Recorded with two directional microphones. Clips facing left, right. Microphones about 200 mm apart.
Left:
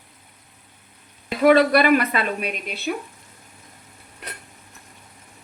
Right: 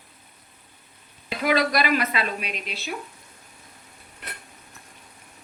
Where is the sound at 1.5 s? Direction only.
55° left (ahead or behind).